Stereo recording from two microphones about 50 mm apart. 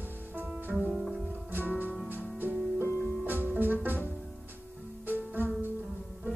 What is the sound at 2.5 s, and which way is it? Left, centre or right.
Music, centre.